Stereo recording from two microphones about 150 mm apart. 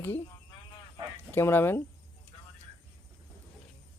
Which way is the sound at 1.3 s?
15° left (ahead or behind).